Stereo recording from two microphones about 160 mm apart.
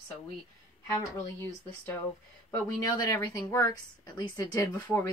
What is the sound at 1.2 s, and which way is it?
Speech, 15° left (ahead or behind).